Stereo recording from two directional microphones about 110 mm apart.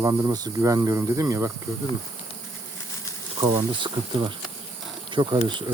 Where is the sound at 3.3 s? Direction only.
45° right (ahead or behind).